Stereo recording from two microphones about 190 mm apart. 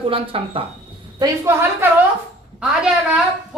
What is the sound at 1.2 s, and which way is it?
Speech, 15° right (ahead or behind).